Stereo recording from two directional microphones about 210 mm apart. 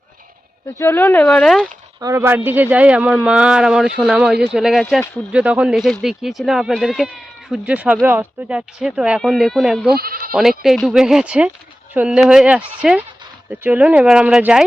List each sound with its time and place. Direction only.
0.8 s speech: 10° left (ahead or behind)
2.0 s speech: 15° right (ahead or behind)
9.9 s speech: 45° right (ahead or behind)
10.6 s speech: centre (ahead or behind)